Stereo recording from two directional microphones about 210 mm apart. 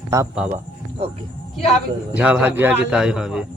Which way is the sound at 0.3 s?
5° right (ahead or behind).